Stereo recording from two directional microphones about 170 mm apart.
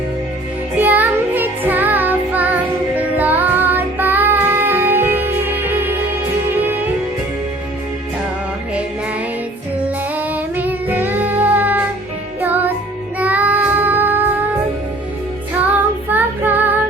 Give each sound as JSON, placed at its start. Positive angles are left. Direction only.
{"t": 0.8, "sound": "music", "side_deg": -10}
{"t": 10.2, "sound": "child singing", "side_deg": -10}
{"t": 12.4, "sound": "music", "side_deg": -10}
{"t": 13.1, "sound": "child singing", "side_deg": -10}
{"t": 15.6, "sound": "child singing", "side_deg": -10}